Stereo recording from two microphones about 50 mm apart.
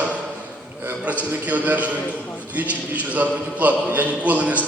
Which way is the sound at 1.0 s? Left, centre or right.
Right.